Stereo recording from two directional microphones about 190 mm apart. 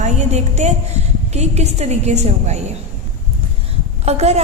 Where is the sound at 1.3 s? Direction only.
35° right (ahead or behind).